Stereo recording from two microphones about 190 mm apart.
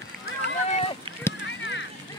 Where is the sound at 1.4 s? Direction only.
75° left (ahead or behind).